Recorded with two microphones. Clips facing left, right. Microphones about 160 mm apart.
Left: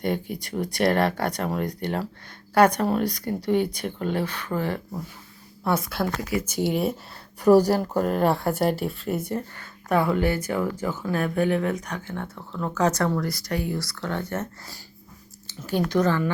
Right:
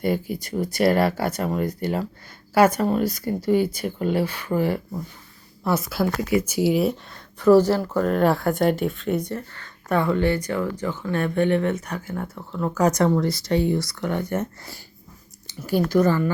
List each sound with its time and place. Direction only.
0.0 s speech: 5° right (ahead or behind)
7.3 s speech: 15° left (ahead or behind)
8.1 s speech: centre (ahead or behind)